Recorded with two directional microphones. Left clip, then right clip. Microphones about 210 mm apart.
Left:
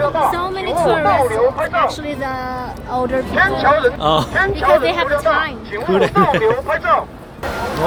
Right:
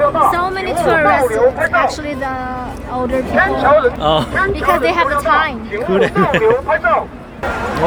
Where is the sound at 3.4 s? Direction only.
45° left (ahead or behind).